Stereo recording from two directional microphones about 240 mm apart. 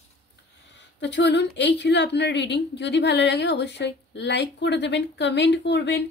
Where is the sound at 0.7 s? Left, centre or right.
Left.